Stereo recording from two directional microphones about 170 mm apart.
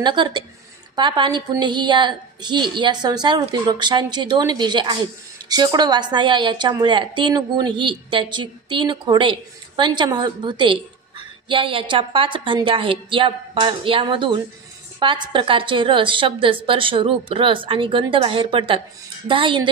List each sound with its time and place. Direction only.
0.0 s a woman's voice: 25° right (ahead or behind)